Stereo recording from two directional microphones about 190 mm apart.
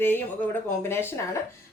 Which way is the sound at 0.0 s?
10° left (ahead or behind).